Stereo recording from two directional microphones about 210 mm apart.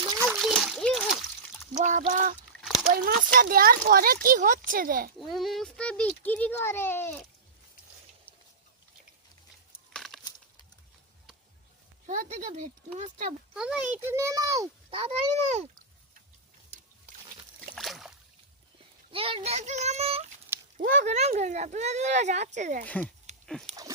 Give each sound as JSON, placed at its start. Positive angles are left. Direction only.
{"t": 0.1, "sound": "splash", "side_deg": -10}
{"t": 0.4, "sound": "splash", "side_deg": 0}
{"t": 1.7, "sound": "speech", "side_deg": -35}
{"t": 5.2, "sound": "a child's voice", "side_deg": 0}
{"t": 9.9, "sound": "crumpling", "side_deg": 0}
{"t": 12.0, "sound": "speech", "side_deg": -35}
{"t": 13.5, "sound": "a child's voice", "side_deg": -5}
{"t": 17.7, "sound": "boat", "side_deg": 0}
{"t": 19.1, "sound": "speech", "side_deg": -25}
{"t": 23.3, "sound": "dog", "side_deg": -35}